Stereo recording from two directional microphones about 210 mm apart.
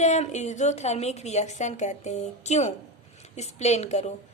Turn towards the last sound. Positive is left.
turn(degrees=30)  # may be behind; listen again after turning